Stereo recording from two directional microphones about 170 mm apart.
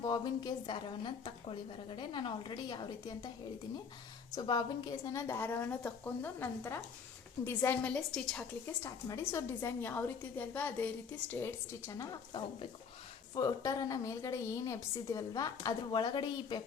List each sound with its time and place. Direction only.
0.0 s a woman's voice: 25° left (ahead or behind)
4.4 s a woman's voice: 25° left (ahead or behind); by 8.4 s 5° left (ahead or behind)
8.6 s a woman's voice: 15° left (ahead or behind)
11.9 s a woman's voice: 20° left (ahead or behind)